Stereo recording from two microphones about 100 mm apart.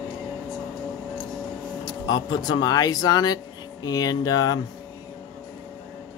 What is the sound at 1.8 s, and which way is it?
Speech, 45° left (ahead or behind).